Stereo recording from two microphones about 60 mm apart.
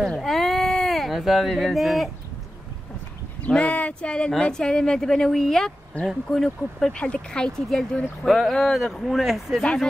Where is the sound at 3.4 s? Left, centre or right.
Left; by 9.6 s centre.